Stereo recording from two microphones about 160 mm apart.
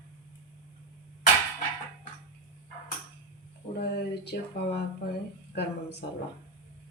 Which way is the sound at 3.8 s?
90° left.